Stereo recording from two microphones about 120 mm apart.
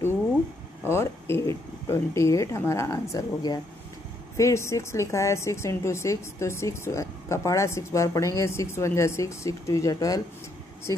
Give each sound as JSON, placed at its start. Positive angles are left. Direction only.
{"t": 0.8, "sound": "a woman's voice", "side_deg": 20}